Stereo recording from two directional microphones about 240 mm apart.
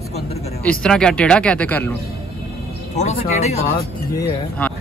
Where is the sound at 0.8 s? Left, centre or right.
Centre.